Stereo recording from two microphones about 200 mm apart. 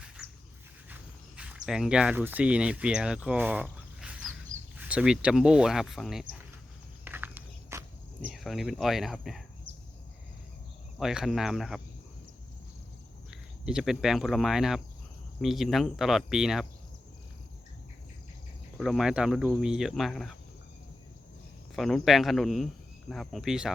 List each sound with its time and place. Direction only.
1.4 s speech: 5° right (ahead or behind)
7.0 s walk: 10° right (ahead or behind)
8.3 s speech: centre (ahead or behind)
11.0 s speech: 5° right (ahead or behind)
13.3 s speech: 5° right (ahead or behind)
18.8 s speech: centre (ahead or behind)
21.8 s speech: centre (ahead or behind)